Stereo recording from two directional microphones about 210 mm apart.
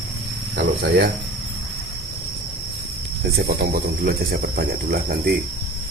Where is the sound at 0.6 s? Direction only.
50° right (ahead or behind).